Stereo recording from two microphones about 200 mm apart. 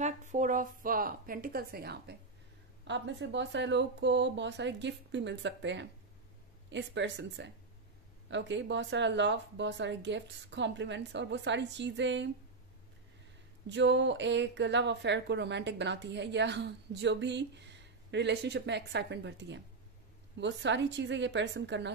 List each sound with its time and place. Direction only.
0.0 s speech: 35° right (ahead or behind); by 2.1 s 50° right (ahead or behind)
2.9 s speech: 65° right (ahead or behind)
13.7 s speech: 65° right (ahead or behind)